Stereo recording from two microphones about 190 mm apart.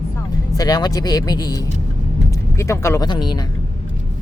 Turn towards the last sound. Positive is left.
turn(degrees=25)  # may be behind; listen again after turning